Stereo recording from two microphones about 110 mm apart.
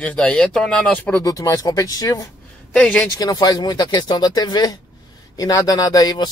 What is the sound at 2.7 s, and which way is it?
Speech, 10° left (ahead or behind).